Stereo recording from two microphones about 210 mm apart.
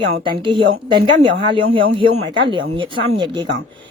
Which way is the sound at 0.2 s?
25° right (ahead or behind).